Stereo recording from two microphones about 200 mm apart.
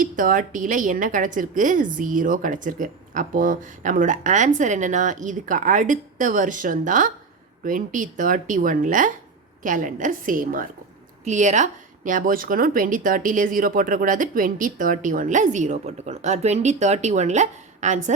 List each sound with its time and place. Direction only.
0.0 s a woman's voice: 40° right (ahead or behind)